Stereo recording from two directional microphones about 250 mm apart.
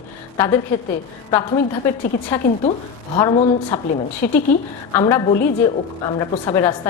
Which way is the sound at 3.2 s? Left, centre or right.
Centre.